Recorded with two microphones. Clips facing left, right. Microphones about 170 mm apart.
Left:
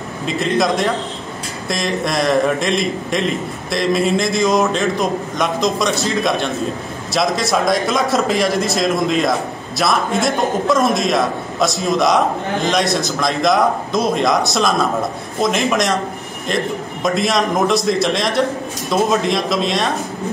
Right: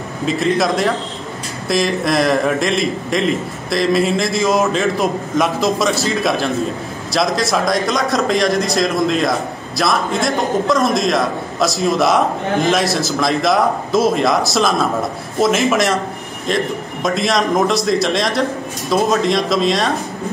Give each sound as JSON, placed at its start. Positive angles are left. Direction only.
{"t": 0.3, "sound": "a man's voice", "side_deg": 0}